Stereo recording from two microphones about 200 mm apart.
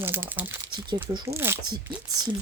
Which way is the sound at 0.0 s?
10° right (ahead or behind).